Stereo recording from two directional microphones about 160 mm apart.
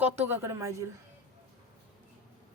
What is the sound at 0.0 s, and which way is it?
Speech, 15° right (ahead or behind).